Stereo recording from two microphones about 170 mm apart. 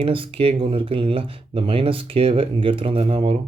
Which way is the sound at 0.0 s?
35° right (ahead or behind).